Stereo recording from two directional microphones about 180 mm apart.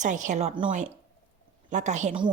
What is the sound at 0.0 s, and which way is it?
Speech, 45° right (ahead or behind).